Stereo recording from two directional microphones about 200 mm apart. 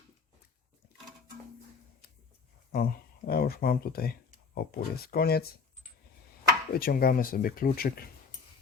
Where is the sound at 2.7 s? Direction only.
50° left (ahead or behind).